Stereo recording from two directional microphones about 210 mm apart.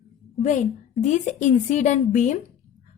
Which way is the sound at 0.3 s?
35° left (ahead or behind).